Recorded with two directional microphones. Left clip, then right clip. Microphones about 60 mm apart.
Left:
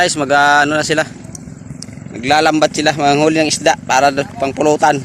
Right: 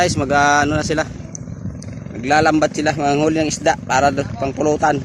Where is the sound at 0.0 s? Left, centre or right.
Centre.